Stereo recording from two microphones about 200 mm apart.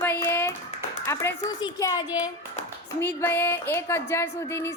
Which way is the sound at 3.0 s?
10° left (ahead or behind).